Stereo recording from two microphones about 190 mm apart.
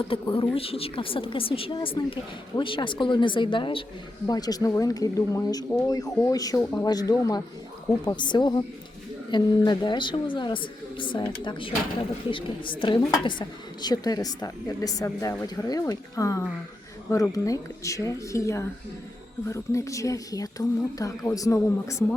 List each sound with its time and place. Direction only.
0.0 s a woman's voice: 25° left (ahead or behind)